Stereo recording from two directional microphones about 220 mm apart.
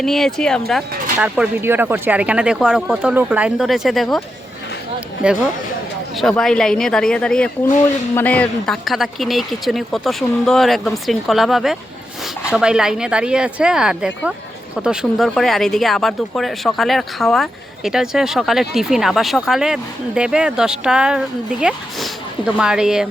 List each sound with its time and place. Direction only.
0.0 s speech: centre (ahead or behind)
1.2 s speech: 10° right (ahead or behind)
5.2 s speech: 5° right (ahead or behind)